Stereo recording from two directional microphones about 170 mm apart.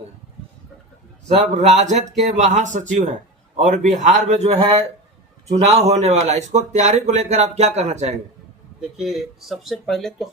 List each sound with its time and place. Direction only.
1.3 s speech: 45° right (ahead or behind)
8.8 s speech: centre (ahead or behind)